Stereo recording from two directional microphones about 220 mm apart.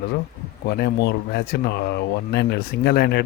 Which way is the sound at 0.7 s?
50° left (ahead or behind).